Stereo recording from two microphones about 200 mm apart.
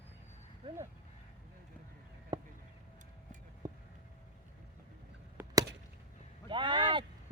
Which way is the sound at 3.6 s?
20° right (ahead or behind).